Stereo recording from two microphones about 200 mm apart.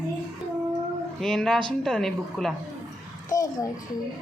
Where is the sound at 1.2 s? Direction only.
Centre (ahead or behind).